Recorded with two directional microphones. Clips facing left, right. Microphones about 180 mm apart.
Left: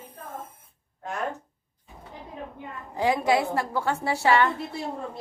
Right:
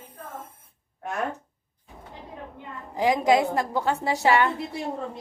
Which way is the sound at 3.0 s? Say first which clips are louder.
Right 2 dB; 15° right (ahead or behind).